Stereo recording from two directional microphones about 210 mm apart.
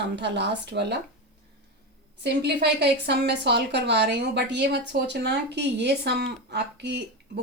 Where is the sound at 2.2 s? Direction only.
50° right (ahead or behind).